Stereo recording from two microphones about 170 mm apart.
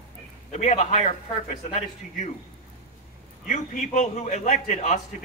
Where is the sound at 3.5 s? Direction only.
45° left (ahead or behind).